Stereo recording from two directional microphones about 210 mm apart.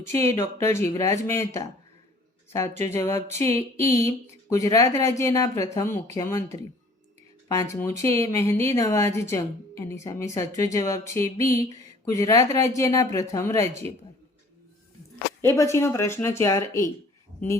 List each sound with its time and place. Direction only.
0.0 s speech: 10° left (ahead or behind)
3.4 s a sound: 30° right (ahead or behind)
4.4 s speech: 15° left (ahead or behind)
15.4 s speech: 15° left (ahead or behind)